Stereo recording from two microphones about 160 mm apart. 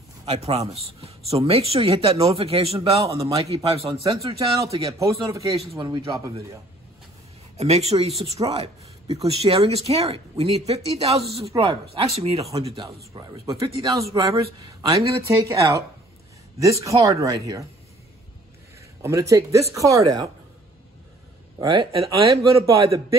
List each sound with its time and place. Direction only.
0.2 s speech: 40° right (ahead or behind)
4.3 s speech: 25° right (ahead or behind)
7.5 s speech: 40° right (ahead or behind)
12.8 s speech: 25° right (ahead or behind)
19.0 s speech: 20° right (ahead or behind)
21.5 s speech: 30° right (ahead or behind)
22.0 s speech: 20° right (ahead or behind)